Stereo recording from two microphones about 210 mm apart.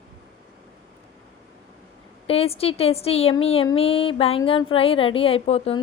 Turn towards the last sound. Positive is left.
turn(degrees=30)  # may be behind; listen again after turning